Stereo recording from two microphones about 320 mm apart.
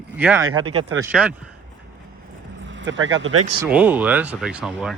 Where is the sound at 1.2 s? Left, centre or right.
Centre.